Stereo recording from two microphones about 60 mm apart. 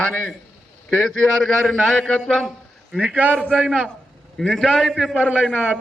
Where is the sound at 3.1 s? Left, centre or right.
Right.